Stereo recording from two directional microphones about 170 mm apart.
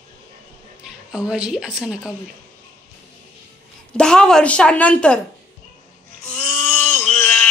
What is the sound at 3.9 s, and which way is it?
A woman's voice, 5° left (ahead or behind).